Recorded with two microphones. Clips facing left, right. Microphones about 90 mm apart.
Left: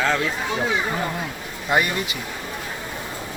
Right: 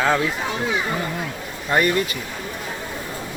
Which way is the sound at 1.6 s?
10° left (ahead or behind).